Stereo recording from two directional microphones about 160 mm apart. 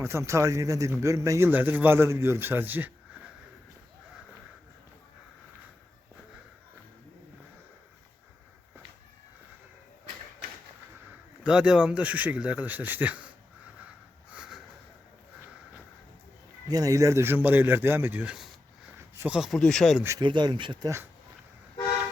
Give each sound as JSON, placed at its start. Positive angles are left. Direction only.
{"t": 0.0, "sound": "speech", "side_deg": -15}
{"t": 11.4, "sound": "speech", "side_deg": -5}
{"t": 14.3, "sound": "a sound", "side_deg": -5}
{"t": 16.6, "sound": "speech", "side_deg": -20}
{"t": 18.9, "sound": "a sound", "side_deg": -15}
{"t": 19.3, "sound": "speech", "side_deg": 0}
{"t": 20.1, "sound": "speech", "side_deg": -30}